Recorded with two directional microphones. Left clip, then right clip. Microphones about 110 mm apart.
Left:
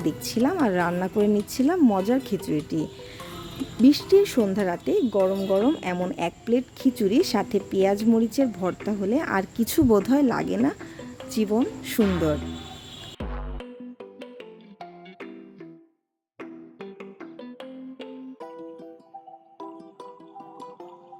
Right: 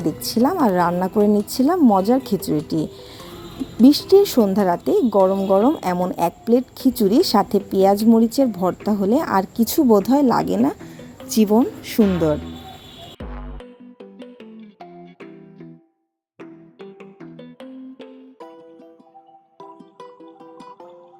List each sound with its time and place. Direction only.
0.0 s speech: 5° left (ahead or behind)
2.2 s speech: 25° left (ahead or behind)
2.5 s a woman's voice: 15° right (ahead or behind)
9.2 s speech: centre (ahead or behind)
11.3 s speech: 35° right (ahead or behind)
11.6 s a woman's voice: 25° right (ahead or behind)
11.9 s speech: centre (ahead or behind)
13.2 s music: centre (ahead or behind)